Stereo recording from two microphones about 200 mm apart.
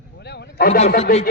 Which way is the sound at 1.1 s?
45° left (ahead or behind).